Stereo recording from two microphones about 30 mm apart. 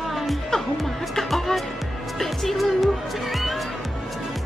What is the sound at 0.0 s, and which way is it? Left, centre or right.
Music, centre.